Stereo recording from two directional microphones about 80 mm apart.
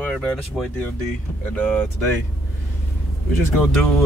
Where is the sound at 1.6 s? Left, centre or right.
Centre.